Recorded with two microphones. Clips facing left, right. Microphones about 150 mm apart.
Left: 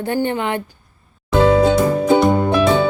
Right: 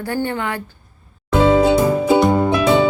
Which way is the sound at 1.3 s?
5° right (ahead or behind).